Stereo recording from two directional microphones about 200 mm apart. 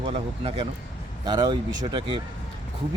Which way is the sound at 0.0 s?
25° right (ahead or behind).